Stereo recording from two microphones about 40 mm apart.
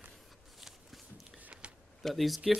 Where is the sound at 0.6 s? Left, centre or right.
Centre.